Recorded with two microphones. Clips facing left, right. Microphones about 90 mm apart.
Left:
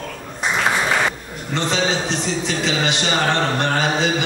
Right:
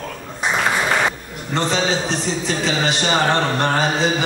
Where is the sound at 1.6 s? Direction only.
40° right (ahead or behind).